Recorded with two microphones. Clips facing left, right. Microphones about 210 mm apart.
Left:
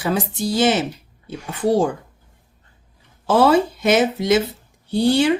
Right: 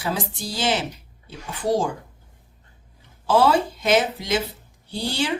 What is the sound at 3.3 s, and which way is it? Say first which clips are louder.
Speech: left 3 dB; 55° left (ahead or behind).